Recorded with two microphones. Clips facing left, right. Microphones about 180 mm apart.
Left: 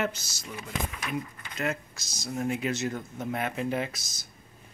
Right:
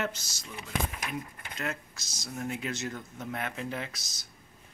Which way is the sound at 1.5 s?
5° left (ahead or behind).